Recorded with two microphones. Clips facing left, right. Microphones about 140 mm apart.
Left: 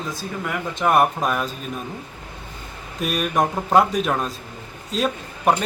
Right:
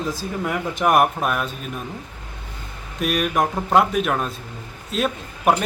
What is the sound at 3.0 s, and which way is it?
A man's voice, centre (ahead or behind).